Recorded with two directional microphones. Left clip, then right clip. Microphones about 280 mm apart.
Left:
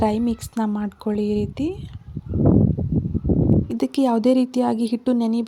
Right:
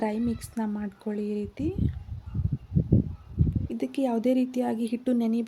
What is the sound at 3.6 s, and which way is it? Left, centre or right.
A woman's voice, left.